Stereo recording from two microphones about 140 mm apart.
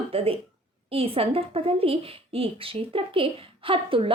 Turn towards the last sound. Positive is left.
turn(degrees=-40)  # may be behind; listen again after turning